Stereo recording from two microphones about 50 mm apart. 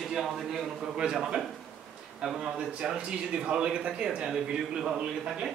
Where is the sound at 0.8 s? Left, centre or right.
Centre.